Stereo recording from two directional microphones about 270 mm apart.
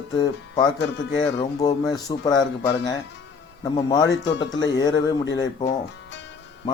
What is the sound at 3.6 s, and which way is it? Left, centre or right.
Speech, centre.